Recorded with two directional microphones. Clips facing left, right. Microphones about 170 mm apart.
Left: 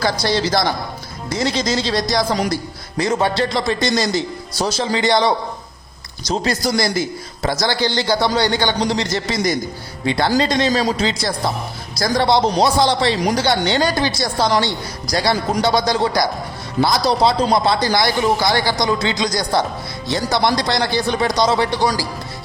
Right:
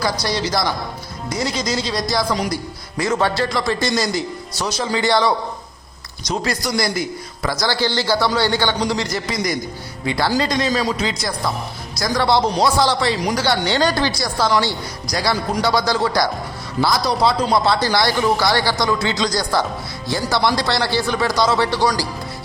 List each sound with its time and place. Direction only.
0.0 s a man's voice: 30° left (ahead or behind)
4.5 s speech: 35° left (ahead or behind)
4.9 s a man's voice: 20° left (ahead or behind)